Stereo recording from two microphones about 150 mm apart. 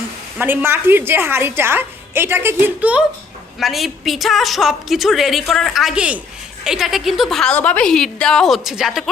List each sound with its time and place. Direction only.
0.3 s a woman's voice: 15° right (ahead or behind)
3.6 s a woman's voice: centre (ahead or behind)